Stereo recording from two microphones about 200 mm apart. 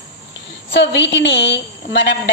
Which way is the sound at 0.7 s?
60° left (ahead or behind).